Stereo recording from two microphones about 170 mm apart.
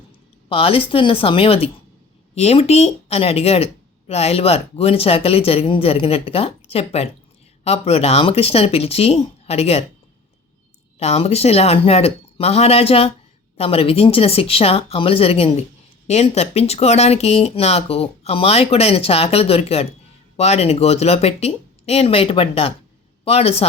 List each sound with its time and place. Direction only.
0.4 s a woman's voice: 35° left (ahead or behind)
11.0 s a woman's voice: 40° left (ahead or behind)